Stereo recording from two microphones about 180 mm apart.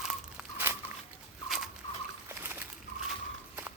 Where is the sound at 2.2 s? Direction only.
15° right (ahead or behind).